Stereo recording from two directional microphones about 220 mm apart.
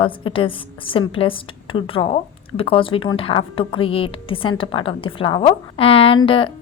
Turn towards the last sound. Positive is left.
turn(degrees=25)  # may be behind; listen again after turning